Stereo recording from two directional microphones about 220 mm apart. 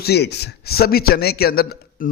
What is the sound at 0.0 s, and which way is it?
A man's voice, 50° left (ahead or behind).